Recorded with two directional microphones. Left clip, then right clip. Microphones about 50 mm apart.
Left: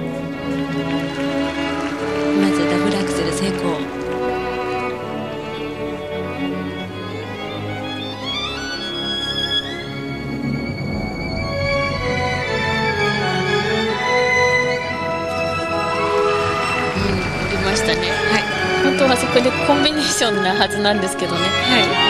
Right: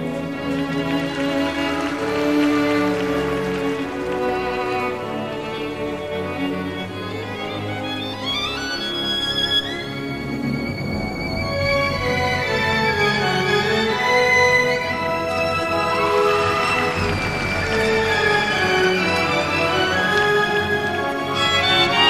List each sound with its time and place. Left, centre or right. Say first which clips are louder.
0.5 s music: even; left
9.4 s music: right 1 dB; left
11.6 s music: even; left